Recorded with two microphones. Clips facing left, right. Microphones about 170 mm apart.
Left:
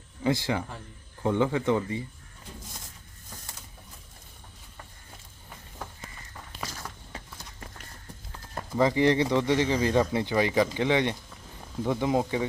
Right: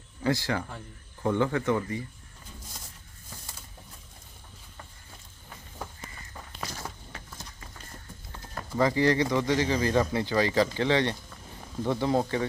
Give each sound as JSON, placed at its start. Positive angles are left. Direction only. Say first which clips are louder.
{"t": 0.2, "sound": "speech", "louder": "left 1 dB", "side_deg": 20}
{"t": 8.5, "sound": "speech", "louder": "left 1 dB", "side_deg": 20}